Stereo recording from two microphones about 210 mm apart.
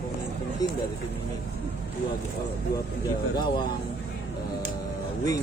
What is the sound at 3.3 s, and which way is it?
Speech, 20° left (ahead or behind).